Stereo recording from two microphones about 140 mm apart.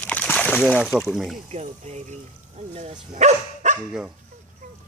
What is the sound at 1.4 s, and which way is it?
Speech, 50° right (ahead or behind).